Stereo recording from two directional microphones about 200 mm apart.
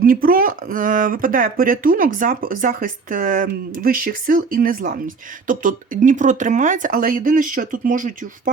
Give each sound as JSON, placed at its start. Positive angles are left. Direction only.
{"t": 0.0, "sound": "speech", "side_deg": -45}